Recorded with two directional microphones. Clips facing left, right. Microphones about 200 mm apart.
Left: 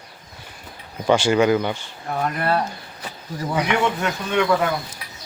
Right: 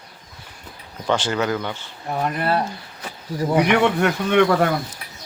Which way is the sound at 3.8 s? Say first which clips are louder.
Right 4 dB; 60° right (ahead or behind).